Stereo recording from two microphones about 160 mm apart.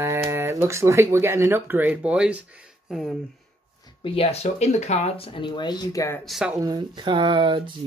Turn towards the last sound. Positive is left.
turn(degrees=-30)  # may be behind; listen again after turning